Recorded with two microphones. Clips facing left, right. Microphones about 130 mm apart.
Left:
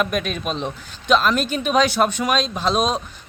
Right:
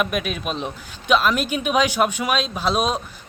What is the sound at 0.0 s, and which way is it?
Speech, 5° right (ahead or behind).